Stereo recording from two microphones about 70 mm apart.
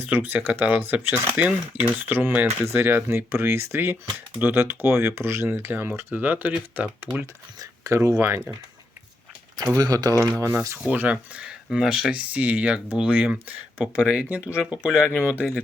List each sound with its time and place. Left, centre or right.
0.0 s speech: right
2.6 s speech: right
7.9 s speech: right
9.7 s speech: right
10.8 s speech: centre